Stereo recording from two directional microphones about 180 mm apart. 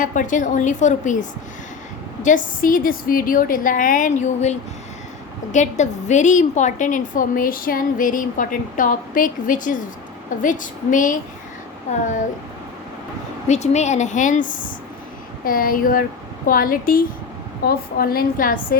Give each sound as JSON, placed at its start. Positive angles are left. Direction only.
{"t": 0.0, "sound": "a woman's voice", "side_deg": 45}
{"t": 2.2, "sound": "a woman's voice", "side_deg": 50}
{"t": 13.5, "sound": "a woman's voice", "side_deg": 40}